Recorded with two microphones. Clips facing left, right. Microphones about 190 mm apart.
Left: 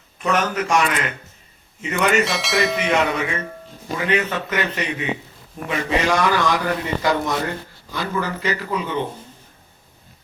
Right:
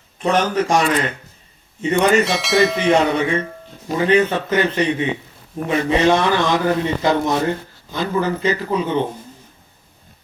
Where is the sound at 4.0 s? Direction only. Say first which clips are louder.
Right 6 dB; 30° right (ahead or behind).